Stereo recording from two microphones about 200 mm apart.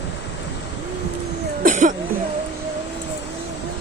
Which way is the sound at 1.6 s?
40° right (ahead or behind).